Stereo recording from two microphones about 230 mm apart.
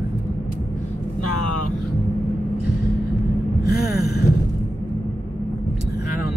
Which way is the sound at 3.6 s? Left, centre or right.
Left.